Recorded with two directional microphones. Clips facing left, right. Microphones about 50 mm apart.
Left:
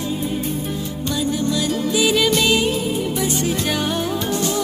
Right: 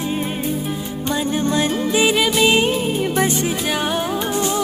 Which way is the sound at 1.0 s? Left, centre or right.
Right.